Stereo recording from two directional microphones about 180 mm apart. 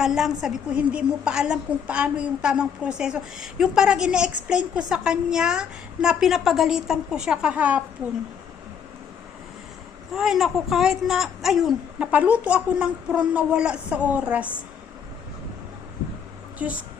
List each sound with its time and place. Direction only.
0.0 s a woman's voice: centre (ahead or behind)
10.2 s a woman's voice: centre (ahead or behind)
16.6 s a woman's voice: 10° right (ahead or behind)